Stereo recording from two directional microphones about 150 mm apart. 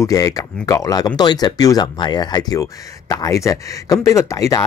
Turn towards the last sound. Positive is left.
turn(degrees=20)  # may be behind; listen again after turning